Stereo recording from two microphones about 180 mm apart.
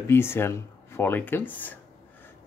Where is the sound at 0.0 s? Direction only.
15° left (ahead or behind).